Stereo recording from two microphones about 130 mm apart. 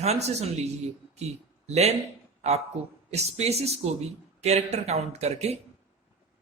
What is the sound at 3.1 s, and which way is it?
A man's voice, 55° right (ahead or behind).